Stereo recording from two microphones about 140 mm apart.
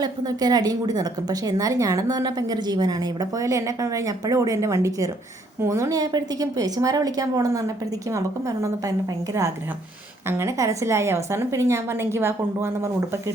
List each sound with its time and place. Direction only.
0.0 s a woman's voice: 30° right (ahead or behind)
10.2 s a woman's voice: 20° right (ahead or behind)